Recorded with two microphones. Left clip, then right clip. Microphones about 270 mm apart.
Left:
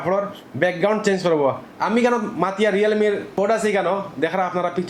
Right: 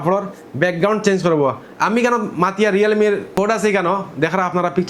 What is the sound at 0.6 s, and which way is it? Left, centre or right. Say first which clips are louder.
A man's voice: right 2 dB; right.